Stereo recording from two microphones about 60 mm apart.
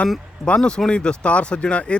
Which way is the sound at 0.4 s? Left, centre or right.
Centre.